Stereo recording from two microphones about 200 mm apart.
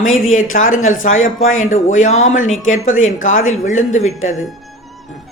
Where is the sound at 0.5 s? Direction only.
45° left (ahead or behind).